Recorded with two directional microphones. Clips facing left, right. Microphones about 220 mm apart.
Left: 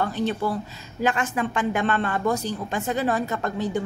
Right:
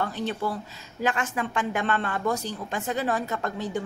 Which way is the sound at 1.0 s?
25° left (ahead or behind).